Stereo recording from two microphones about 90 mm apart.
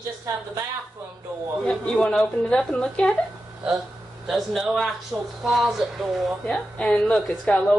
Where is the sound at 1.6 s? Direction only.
10° left (ahead or behind).